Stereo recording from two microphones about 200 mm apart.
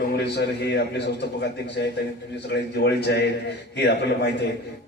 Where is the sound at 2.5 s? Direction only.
60° left (ahead or behind).